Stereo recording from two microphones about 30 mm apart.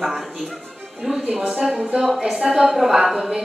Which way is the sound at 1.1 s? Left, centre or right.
Centre.